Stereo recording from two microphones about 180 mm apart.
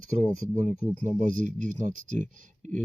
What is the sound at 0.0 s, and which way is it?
Speech, 45° right (ahead or behind).